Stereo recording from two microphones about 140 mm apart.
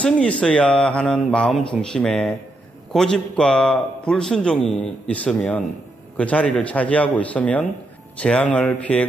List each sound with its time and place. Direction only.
0.0 s a man's voice: 10° left (ahead or behind)